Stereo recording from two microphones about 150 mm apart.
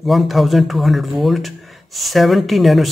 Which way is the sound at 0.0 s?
Centre (ahead or behind).